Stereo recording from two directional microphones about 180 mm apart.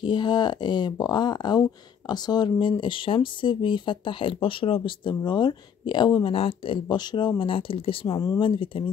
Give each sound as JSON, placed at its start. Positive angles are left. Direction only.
{"t": 0.0, "sound": "speech", "side_deg": 25}